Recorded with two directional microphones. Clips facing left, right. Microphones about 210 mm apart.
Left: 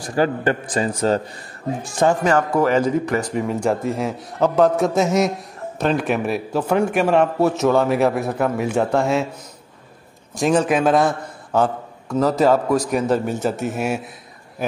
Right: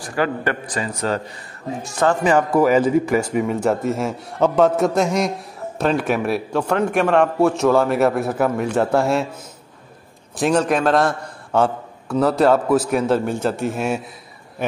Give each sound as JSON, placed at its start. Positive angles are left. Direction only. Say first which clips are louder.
{"t": 0.4, "sound": "a man's voice", "louder": "left 3 dB", "side_deg": 30}
{"t": 2.2, "sound": "a man's voice", "louder": "right 2 dB", "side_deg": -10}
{"t": 10.4, "sound": "a man's voice", "louder": "even", "side_deg": 5}